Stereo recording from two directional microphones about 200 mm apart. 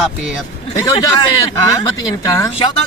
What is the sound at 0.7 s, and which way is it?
Speech, 15° left (ahead or behind).